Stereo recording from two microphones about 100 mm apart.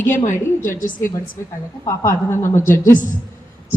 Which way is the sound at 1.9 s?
25° left (ahead or behind).